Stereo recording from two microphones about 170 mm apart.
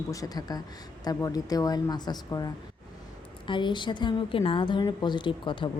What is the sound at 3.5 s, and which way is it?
Speech, 30° left (ahead or behind).